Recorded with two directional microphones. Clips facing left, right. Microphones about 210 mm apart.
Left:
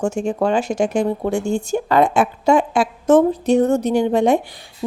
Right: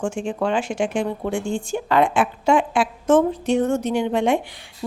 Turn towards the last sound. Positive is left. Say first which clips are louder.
# left 4 dB
turn(degrees=40)  # may be behind; listen again after turning